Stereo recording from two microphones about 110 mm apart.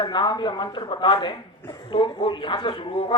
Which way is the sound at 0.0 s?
45° left (ahead or behind).